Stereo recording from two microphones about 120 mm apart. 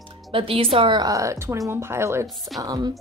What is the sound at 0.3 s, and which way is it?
A woman's voice, 50° right (ahead or behind).